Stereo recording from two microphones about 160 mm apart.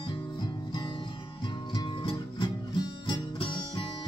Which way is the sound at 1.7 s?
30° left (ahead or behind).